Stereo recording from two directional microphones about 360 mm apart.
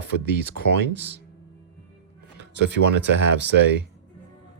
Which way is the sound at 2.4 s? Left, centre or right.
Right.